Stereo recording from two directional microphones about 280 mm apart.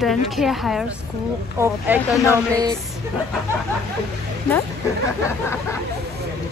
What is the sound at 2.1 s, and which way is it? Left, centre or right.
Speech, centre.